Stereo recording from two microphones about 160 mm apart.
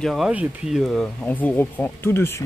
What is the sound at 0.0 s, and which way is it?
Speech, 5° left (ahead or behind).